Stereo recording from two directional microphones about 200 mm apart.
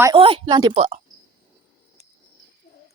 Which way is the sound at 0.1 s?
25° right (ahead or behind).